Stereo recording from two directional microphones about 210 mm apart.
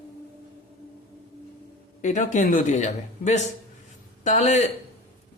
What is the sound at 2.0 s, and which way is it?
A man's voice, 35° left (ahead or behind).